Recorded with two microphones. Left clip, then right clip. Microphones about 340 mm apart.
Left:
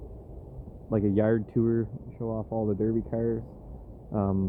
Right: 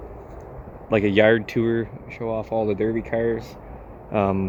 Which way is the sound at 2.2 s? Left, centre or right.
Centre.